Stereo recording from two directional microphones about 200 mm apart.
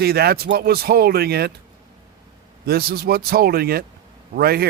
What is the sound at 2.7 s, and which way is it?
Speech, 50° right (ahead or behind).